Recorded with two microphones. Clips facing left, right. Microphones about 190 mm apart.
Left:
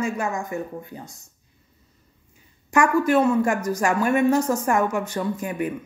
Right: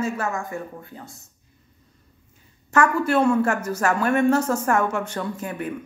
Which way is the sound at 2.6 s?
10° left (ahead or behind).